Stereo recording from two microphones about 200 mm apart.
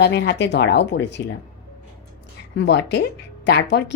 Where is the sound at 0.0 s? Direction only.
60° left (ahead or behind).